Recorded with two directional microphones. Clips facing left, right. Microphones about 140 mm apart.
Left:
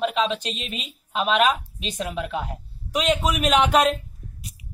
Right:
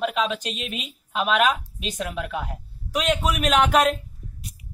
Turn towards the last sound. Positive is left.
turn(degrees=0)  # may be behind; listen again after turning